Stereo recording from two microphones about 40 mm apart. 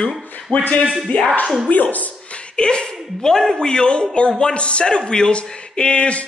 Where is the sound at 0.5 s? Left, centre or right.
Left.